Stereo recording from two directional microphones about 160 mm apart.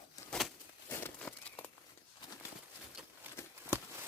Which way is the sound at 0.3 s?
Centre (ahead or behind).